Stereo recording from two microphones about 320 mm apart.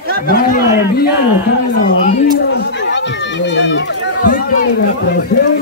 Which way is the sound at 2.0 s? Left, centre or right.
Centre.